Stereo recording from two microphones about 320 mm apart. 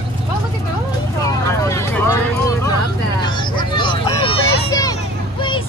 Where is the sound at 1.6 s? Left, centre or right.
Centre.